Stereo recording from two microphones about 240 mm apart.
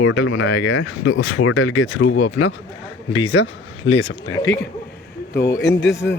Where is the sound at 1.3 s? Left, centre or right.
Left.